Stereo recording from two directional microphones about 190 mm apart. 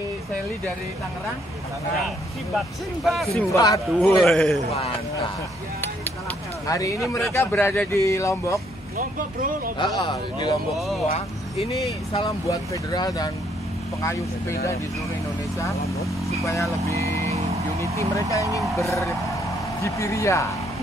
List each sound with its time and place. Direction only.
2.5 s speech: centre (ahead or behind)
3.5 s speech: 20° left (ahead or behind)
4.0 s speech: 5° left (ahead or behind)
6.7 s speech: 15° left (ahead or behind)
9.8 s speech: 25° left (ahead or behind)
12.3 s speech: 20° left (ahead or behind)
16.8 s vehicle: 15° left (ahead or behind)
19.8 s speech: 15° left (ahead or behind)